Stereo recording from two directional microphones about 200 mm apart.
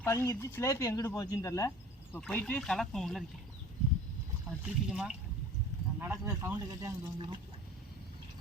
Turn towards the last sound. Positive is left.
turn(degrees=-25)  # may be behind; listen again after turning